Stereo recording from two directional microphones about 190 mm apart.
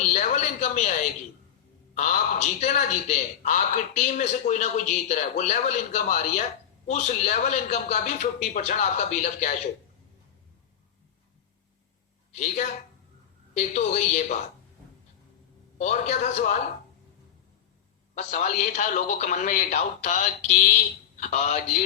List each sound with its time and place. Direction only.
0.0 s a sound: 40° left (ahead or behind)
2.0 s a man's voice: 40° left (ahead or behind)
12.3 s a man's voice: 40° left (ahead or behind)
15.8 s a man's voice: 35° left (ahead or behind)
18.1 s a man's voice: 35° left (ahead or behind)